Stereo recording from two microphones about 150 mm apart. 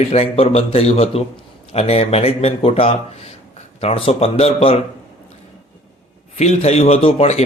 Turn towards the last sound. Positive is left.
turn(degrees=45)  # may be behind; listen again after turning